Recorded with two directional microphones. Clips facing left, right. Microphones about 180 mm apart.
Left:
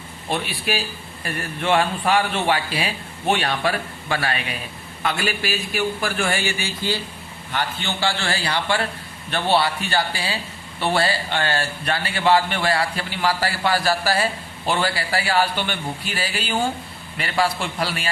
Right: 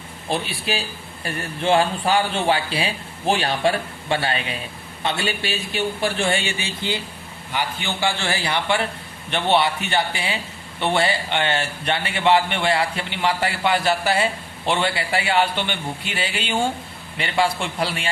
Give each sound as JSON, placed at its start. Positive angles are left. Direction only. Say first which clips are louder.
{"t": 0.3, "sound": "a man's voice", "louder": "even", "side_deg": -30}